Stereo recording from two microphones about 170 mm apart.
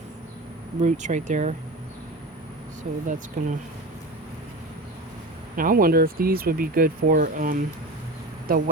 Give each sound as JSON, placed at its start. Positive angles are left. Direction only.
{"t": 0.8, "sound": "speech", "side_deg": -45}
{"t": 2.8, "sound": "speech", "side_deg": -45}
{"t": 5.5, "sound": "speech", "side_deg": -55}